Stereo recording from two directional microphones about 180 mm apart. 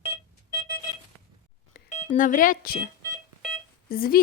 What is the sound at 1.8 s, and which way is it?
Telephone dialing, 55° left (ahead or behind).